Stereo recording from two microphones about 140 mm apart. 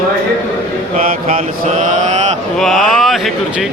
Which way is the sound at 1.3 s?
65° right (ahead or behind).